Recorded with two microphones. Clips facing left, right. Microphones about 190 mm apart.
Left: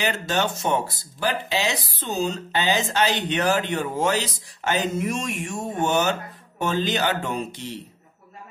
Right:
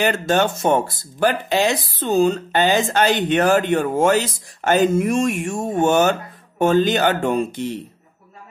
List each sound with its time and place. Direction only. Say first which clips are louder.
0.0 s speech: right 6 dB; 50° right (ahead or behind)